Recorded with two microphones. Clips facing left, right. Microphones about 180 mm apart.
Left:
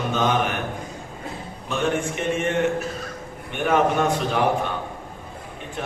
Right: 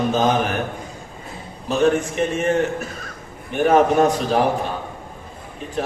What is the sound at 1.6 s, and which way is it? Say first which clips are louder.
A man's voice: right 6 dB; 35° right (ahead or behind).